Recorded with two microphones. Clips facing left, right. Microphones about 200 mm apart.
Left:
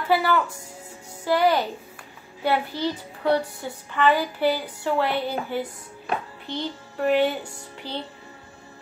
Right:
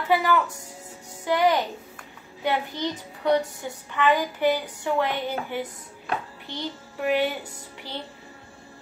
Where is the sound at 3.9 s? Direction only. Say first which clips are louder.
Left 1 dB; 15° right (ahead or behind).